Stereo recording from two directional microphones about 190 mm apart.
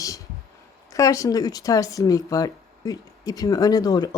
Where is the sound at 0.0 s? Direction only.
20° left (ahead or behind).